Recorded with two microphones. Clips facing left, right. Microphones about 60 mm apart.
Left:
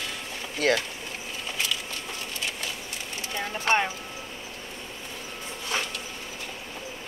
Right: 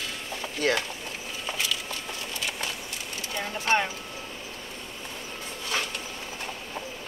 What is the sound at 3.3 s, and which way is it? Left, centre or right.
Speech, left.